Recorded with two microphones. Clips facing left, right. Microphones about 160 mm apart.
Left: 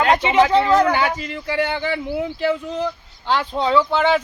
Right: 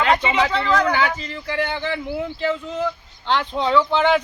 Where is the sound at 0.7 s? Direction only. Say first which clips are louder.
Left 3 dB; 20° left (ahead or behind).